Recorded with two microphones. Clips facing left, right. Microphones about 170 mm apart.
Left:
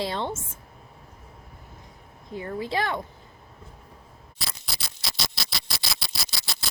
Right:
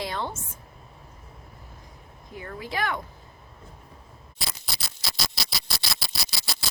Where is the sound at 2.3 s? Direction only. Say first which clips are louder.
Left 5 dB; 25° left (ahead or behind).